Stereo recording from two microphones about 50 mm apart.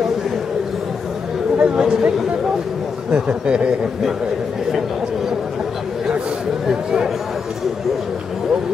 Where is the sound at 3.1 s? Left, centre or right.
Right.